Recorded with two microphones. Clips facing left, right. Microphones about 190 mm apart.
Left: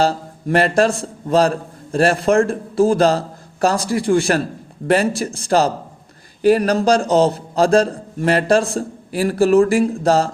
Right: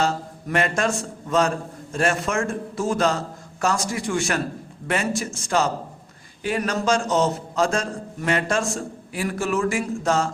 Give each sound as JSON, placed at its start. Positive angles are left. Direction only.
{"t": 0.0, "sound": "a man's voice", "side_deg": 35}